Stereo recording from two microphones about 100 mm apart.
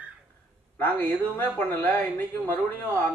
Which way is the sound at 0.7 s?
20° left (ahead or behind).